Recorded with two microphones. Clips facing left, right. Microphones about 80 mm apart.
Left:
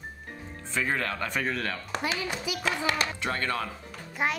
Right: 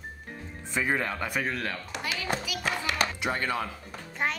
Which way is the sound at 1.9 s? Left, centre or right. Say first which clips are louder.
Left 5 dB; left.